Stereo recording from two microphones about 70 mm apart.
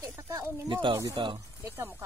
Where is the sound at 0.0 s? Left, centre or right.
Right.